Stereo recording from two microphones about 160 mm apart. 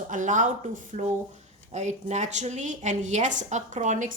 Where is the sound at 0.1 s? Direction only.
50° right (ahead or behind).